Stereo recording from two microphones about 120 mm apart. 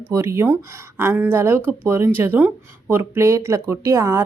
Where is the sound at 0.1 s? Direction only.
20° right (ahead or behind).